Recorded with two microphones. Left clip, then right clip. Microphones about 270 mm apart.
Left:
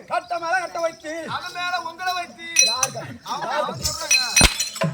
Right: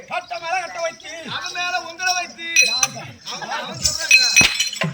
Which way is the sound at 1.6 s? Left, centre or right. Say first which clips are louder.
Right 3 dB; centre.